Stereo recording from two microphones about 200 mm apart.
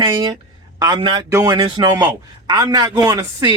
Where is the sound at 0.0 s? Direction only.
20° right (ahead or behind).